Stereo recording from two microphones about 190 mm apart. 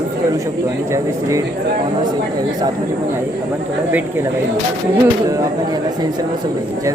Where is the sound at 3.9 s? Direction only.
10° right (ahead or behind).